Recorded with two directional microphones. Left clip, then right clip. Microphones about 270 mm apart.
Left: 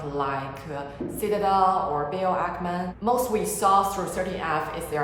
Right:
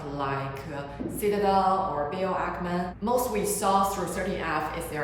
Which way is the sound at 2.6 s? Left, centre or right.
Centre.